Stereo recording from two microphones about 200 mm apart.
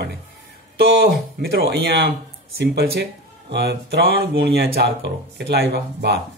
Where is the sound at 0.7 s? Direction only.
50° right (ahead or behind).